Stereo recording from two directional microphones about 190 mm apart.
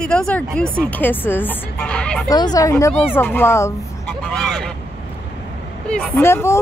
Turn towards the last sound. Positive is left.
turn(degrees=15)  # may be behind; listen again after turning